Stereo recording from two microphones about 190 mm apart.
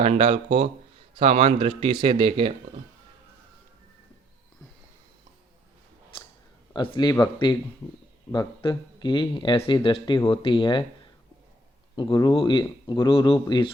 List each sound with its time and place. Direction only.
0.0 s speech: 35° right (ahead or behind)
6.7 s speech: 25° left (ahead or behind)